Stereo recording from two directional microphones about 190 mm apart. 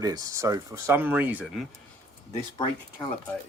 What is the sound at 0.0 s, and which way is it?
Speech, 20° right (ahead or behind).